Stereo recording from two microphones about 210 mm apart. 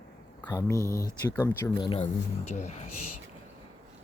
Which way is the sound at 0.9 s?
45° left (ahead or behind).